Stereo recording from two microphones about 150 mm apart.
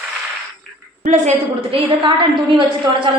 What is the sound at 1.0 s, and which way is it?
Speech, 55° right (ahead or behind).